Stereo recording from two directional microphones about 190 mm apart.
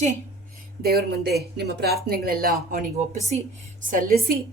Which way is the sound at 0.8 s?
55° right (ahead or behind).